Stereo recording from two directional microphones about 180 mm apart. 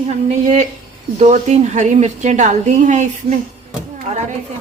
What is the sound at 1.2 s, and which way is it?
A woman's voice, 40° right (ahead or behind).